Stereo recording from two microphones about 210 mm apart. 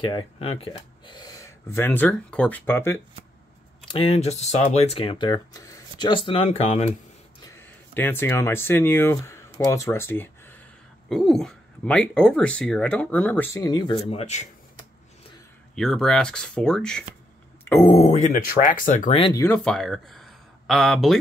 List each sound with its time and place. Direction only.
0.0 s speech: 25° left (ahead or behind)
3.8 s speech: 25° left (ahead or behind)
7.5 s speech: 10° left (ahead or behind); by 14.5 s 30° left (ahead or behind)
15.7 s speech: centre (ahead or behind)
17.8 s speech: 30° left (ahead or behind)
19.1 s speech: 25° left (ahead or behind)
19.4 s speech: 5° left (ahead or behind)